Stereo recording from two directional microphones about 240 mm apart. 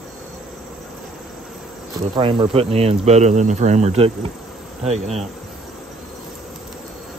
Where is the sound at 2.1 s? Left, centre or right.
Right.